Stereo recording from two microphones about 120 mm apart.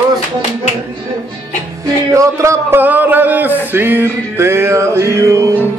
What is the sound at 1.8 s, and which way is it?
A man's voice, 25° right (ahead or behind).